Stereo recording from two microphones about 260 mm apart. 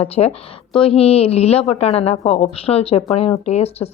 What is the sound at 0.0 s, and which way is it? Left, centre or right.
Speech, left.